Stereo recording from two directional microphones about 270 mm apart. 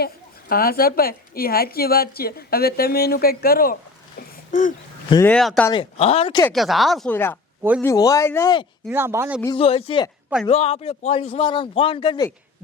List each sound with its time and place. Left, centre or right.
0.0 s a woman's voice: left
5.0 s speech: centre
5.3 s speech: centre
5.7 s a man's voice: left
6.4 s speech: centre
8.9 s speech: centre
9.4 s a man's voice: centre